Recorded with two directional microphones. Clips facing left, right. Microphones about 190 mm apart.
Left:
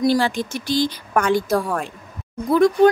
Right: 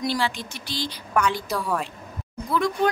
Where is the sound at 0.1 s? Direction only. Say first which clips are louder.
Left 7 dB; 45° left (ahead or behind).